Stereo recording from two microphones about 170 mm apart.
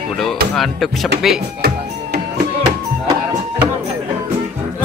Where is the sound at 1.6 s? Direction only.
70° right (ahead or behind).